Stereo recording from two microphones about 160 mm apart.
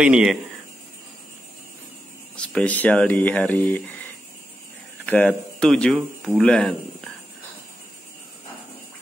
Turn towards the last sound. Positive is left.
turn(degrees=5)  # may be behind; listen again after turning